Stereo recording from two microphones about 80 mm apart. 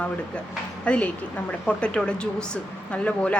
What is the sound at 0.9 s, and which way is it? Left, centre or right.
A woman's voice, centre.